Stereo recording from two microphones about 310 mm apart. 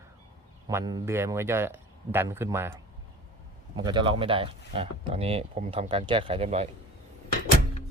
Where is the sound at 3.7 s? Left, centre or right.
Centre.